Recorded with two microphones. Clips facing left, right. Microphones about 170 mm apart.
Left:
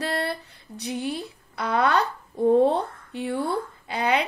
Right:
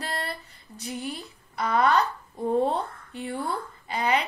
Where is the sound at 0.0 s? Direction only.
65° left (ahead or behind).